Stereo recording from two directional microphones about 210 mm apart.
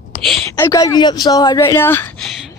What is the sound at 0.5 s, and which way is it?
Speech, 15° left (ahead or behind).